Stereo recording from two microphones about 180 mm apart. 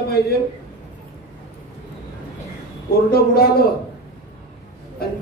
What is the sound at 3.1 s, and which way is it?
Speech, 60° left (ahead or behind).